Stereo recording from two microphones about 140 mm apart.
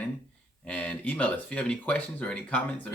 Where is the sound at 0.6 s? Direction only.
10° left (ahead or behind).